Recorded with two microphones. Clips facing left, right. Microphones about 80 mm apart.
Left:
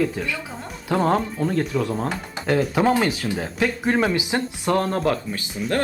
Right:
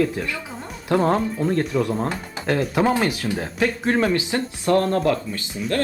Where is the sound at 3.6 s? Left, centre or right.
Centre.